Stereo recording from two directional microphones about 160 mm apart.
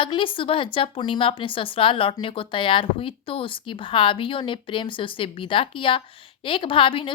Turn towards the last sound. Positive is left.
turn(degrees=35)  # may be behind; listen again after turning